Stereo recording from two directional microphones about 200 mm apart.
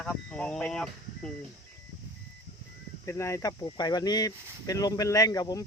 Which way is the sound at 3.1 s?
15° left (ahead or behind).